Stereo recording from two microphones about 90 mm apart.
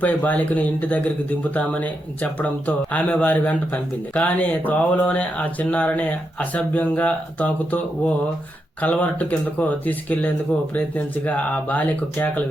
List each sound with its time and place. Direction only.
0.0 s speech: 20° left (ahead or behind)